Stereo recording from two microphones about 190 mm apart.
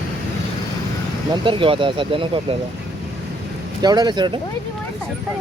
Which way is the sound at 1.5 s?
25° right (ahead or behind).